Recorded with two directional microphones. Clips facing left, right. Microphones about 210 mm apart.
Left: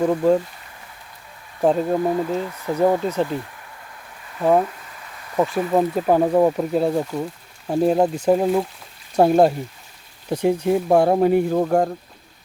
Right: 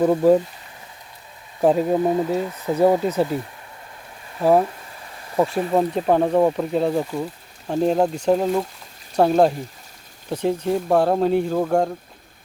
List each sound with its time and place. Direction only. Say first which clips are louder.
0.0 s speech: right 2 dB; 10° right (ahead or behind)
1.6 s speech: right 1 dB; 5° right (ahead or behind)
4.6 s a sound: right 1 dB; 30° right (ahead or behind)
5.5 s speech: even; 30° right (ahead or behind)
5.7 s speech: left 1 dB; 5° left (ahead or behind)